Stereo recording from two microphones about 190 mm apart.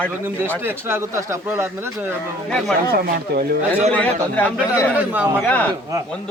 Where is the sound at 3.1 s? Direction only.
55° right (ahead or behind).